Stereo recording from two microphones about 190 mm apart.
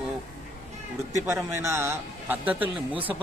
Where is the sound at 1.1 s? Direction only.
15° right (ahead or behind).